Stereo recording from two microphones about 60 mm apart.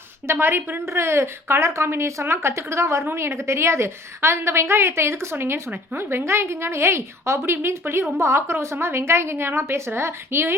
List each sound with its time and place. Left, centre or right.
0.3 s a woman's voice: right